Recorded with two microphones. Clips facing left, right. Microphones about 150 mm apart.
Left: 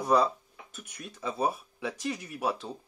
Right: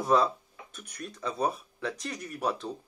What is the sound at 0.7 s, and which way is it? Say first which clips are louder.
Speech: right 3 dB; centre (ahead or behind).